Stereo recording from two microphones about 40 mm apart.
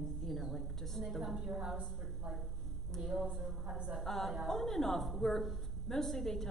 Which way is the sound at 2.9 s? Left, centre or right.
Centre.